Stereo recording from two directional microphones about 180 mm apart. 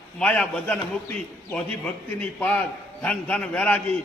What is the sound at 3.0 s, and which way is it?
Speech, 5° left (ahead or behind).